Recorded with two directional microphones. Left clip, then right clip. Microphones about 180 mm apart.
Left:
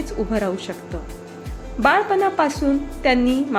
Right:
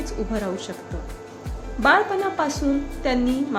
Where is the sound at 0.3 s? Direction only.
20° left (ahead or behind).